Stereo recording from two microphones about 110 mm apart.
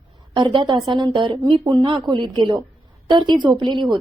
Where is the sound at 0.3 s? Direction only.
45° right (ahead or behind).